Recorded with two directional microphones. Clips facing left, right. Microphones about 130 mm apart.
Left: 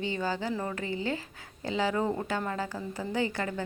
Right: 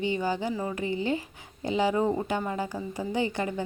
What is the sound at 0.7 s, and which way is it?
Speech, 20° right (ahead or behind).